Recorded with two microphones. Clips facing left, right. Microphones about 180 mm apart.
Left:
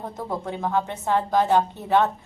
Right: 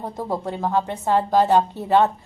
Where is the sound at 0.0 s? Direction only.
10° right (ahead or behind).